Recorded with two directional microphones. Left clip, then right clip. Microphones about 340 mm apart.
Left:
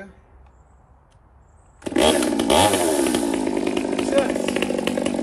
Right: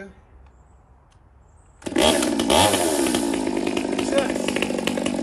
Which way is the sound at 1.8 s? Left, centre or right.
Centre.